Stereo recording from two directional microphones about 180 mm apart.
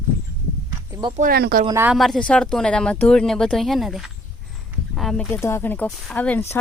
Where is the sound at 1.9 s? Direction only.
Centre (ahead or behind).